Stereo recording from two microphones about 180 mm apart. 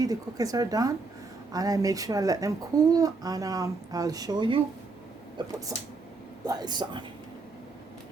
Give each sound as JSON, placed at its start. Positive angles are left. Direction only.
{"t": 0.0, "sound": "speech", "side_deg": -20}